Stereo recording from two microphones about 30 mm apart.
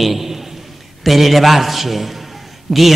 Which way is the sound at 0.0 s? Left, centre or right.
Centre.